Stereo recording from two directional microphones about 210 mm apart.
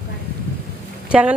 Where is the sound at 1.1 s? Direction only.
5° right (ahead or behind).